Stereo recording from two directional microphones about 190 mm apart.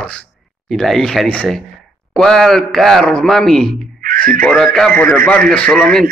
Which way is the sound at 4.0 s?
50° right (ahead or behind).